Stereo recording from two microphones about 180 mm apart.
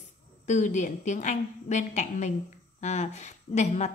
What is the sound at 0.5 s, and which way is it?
A woman's voice, 40° left (ahead or behind).